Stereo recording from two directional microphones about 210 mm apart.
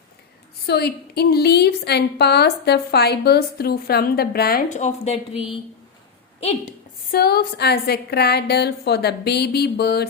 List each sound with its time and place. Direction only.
0.7 s a woman's voice: 50° left (ahead or behind); by 5.1 s 35° left (ahead or behind)
6.4 s a woman's voice: 30° left (ahead or behind)
7.1 s a woman's voice: 50° left (ahead or behind)